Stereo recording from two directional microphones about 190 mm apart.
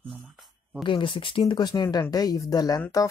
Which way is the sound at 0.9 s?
25° left (ahead or behind).